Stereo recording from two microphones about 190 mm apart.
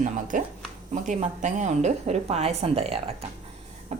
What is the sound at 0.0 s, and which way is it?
Speech, 45° right (ahead or behind).